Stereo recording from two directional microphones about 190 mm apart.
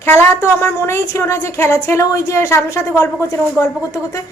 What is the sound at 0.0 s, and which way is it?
Speech, 15° left (ahead or behind).